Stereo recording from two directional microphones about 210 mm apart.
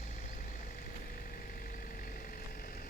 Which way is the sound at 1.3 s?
40° left (ahead or behind).